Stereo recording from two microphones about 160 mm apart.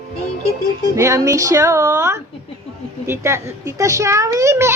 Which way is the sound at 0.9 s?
20° right (ahead or behind).